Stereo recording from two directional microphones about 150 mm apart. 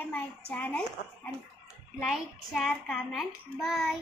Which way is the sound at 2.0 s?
Centre (ahead or behind).